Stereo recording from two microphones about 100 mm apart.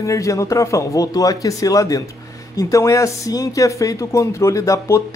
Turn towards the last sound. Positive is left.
turn(degrees=30)  # may be behind; listen again after turning